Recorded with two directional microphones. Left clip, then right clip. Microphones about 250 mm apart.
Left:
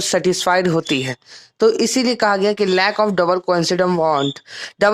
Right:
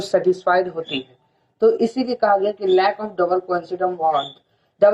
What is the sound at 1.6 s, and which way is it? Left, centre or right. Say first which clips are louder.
Speech: left 2 dB; left.